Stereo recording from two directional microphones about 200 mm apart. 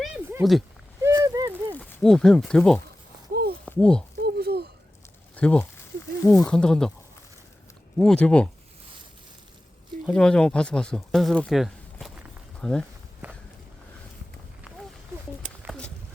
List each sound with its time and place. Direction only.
0.0 s a sound: 10° right (ahead or behind)
1.7 s speech: 5° left (ahead or behind)
4.2 s a sound: 50° right (ahead or behind)
5.4 s speech: 5° left (ahead or behind)
7.9 s speech: 5° left (ahead or behind)
10.1 s speech: 5° left (ahead or behind)